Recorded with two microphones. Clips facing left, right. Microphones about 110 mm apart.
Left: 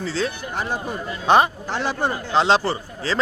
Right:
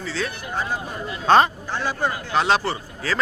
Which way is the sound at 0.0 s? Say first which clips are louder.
Left 3 dB; 35° left (ahead or behind).